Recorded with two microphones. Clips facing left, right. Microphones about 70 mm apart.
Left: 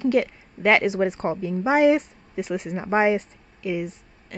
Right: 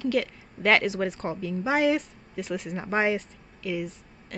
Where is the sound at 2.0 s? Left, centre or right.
Centre.